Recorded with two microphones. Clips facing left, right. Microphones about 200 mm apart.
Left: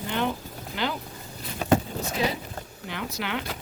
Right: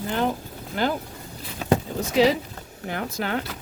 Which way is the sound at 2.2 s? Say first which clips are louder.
Right 9 dB; 90° right.